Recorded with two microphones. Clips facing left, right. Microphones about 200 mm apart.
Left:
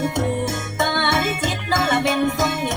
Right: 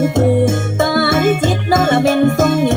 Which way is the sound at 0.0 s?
50° right (ahead or behind).